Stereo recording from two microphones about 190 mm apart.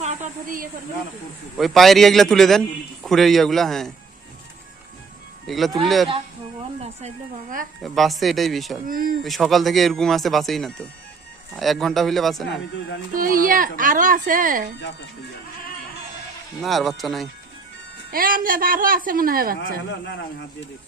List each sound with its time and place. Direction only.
0.0 s speech: 35° right (ahead or behind)
1.5 s a man's voice: centre (ahead or behind)
5.5 s a man's voice: centre (ahead or behind)
7.8 s a man's voice: centre (ahead or behind)
8.9 s speech: 50° right (ahead or behind)
9.2 s a man's voice: centre (ahead or behind)
13.1 s speech: 45° right (ahead or behind)
16.6 s a man's voice: centre (ahead or behind)
18.1 s speech: 50° right (ahead or behind)